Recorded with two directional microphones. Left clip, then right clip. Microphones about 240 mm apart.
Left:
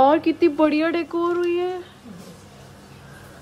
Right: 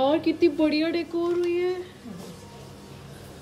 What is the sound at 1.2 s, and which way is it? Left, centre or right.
Speech, left.